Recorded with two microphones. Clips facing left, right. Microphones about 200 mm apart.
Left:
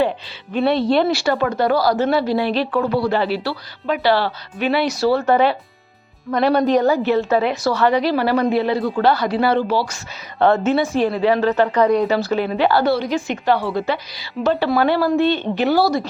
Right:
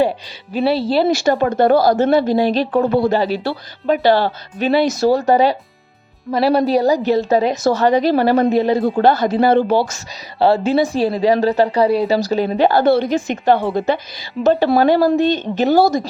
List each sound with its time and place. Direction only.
0.5 s speech: 5° right (ahead or behind)
1.5 s a woman's voice: 50° right (ahead or behind)
6.6 s a woman's voice: 35° right (ahead or behind); by 9.9 s 50° right (ahead or behind)
10.4 s a woman's voice: 30° right (ahead or behind)